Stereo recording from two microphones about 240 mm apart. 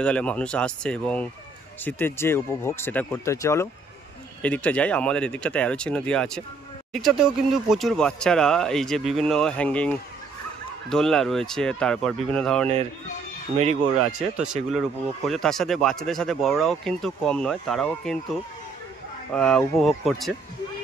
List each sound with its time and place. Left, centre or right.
0.0 s speech: centre
13.6 s speech: right
14.3 s speech: centre